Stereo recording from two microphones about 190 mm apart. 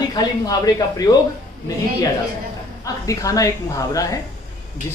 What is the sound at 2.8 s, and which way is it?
Speech, 15° left (ahead or behind).